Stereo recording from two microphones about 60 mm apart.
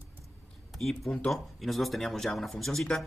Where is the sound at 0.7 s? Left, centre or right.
Centre.